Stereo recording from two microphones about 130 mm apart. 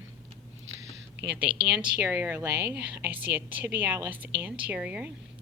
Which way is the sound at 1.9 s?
15° right (ahead or behind).